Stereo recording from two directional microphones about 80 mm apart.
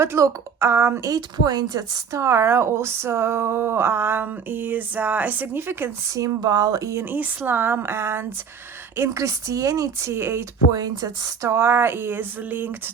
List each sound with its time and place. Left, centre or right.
0.0 s speech: right
1.1 s a woman's voice: right
2.1 s speech: right
6.1 s a woman's voice: right
7.0 s speech: right
9.0 s a woman's voice: right
10.1 s speech: right
10.7 s a woman's voice: right
11.4 s speech: right